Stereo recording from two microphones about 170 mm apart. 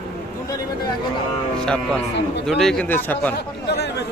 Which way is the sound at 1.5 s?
5° left (ahead or behind).